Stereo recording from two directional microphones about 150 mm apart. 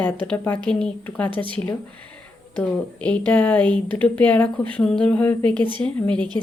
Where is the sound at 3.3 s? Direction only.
10° left (ahead or behind).